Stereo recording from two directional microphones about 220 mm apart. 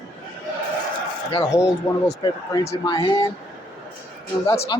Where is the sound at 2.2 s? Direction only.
20° left (ahead or behind).